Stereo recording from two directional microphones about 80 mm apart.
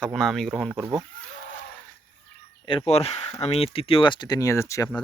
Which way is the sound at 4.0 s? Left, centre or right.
Left.